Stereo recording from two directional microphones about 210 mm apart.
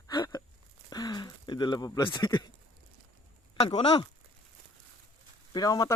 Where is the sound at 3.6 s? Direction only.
25° left (ahead or behind).